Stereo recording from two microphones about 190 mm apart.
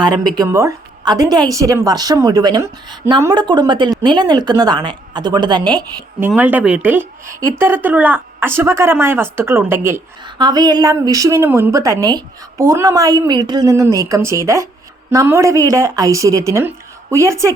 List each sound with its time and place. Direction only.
0.0 s speech: 20° right (ahead or behind)
6.1 s speech: 10° right (ahead or behind)
10.2 s speech: 25° right (ahead or behind)